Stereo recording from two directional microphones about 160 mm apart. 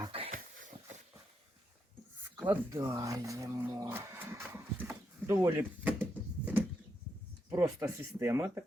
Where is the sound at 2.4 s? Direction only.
15° right (ahead or behind).